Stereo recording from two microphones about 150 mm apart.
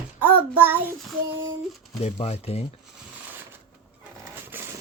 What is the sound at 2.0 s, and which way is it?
Speech, 45° left (ahead or behind).